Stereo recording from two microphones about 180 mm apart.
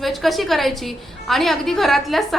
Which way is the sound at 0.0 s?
Centre (ahead or behind).